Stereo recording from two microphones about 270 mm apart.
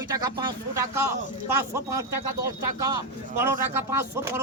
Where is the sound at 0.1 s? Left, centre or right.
Centre.